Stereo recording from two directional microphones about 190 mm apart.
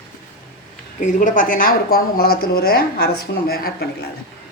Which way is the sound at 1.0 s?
45° left (ahead or behind).